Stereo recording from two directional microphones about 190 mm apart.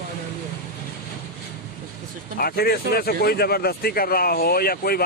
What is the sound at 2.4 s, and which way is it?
Speech, 55° left (ahead or behind).